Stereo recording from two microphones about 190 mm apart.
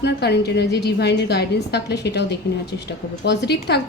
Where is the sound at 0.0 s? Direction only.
60° left (ahead or behind).